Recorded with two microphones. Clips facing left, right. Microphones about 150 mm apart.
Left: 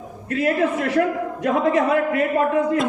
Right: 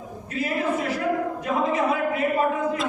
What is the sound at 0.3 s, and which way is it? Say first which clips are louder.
A man's voice: left 6 dB; 65° left (ahead or behind).